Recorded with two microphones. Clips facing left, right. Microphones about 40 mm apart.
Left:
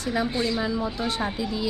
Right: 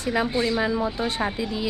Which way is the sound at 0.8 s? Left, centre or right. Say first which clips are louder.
Right 2 dB; centre.